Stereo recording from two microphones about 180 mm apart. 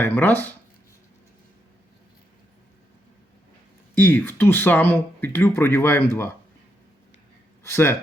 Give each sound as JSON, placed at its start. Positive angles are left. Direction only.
{"t": 0.0, "sound": "speech", "side_deg": 10}
{"t": 3.9, "sound": "speech", "side_deg": 10}
{"t": 7.6, "sound": "speech", "side_deg": 15}